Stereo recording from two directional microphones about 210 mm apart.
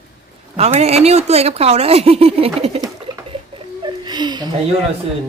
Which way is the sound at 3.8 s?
20° right (ahead or behind).